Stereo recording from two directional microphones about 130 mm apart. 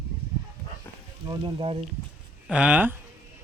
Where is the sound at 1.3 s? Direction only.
40° right (ahead or behind).